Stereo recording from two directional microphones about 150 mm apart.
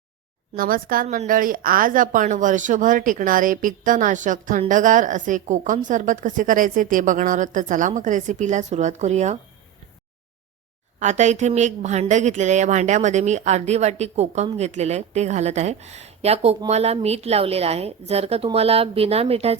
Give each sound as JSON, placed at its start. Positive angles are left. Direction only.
{"t": 0.5, "sound": "speech", "side_deg": -70}
{"t": 1.0, "sound": "a woman's voice", "side_deg": -50}
{"t": 1.3, "sound": "a woman's voice", "side_deg": -65}
{"t": 11.0, "sound": "a woman's voice", "side_deg": -50}